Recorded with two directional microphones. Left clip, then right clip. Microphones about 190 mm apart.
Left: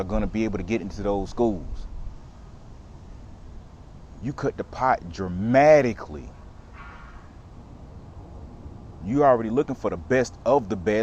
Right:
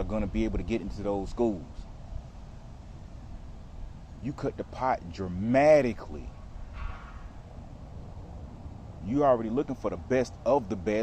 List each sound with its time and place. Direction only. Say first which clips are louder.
0.0 s speech: left 5 dB; 20° left (ahead or behind)
4.2 s speech: left 6 dB; 20° left (ahead or behind)
9.0 s speech: left 5 dB; 25° left (ahead or behind)